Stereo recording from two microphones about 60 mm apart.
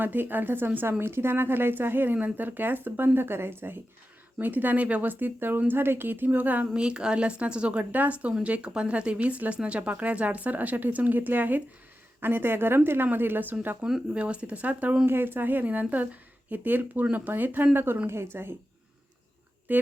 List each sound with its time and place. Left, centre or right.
0.0 s speech: right
6.7 s speech: centre; by 13.7 s right
14.1 s speech: right
15.0 s speech: right
19.7 s speech: right